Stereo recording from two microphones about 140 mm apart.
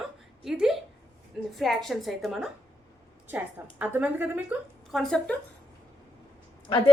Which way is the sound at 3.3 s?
10° right (ahead or behind).